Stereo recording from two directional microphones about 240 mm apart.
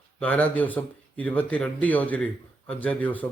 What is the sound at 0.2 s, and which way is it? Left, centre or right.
Speech, centre.